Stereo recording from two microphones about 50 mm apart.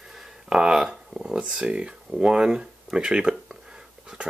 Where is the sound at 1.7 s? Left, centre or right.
Centre.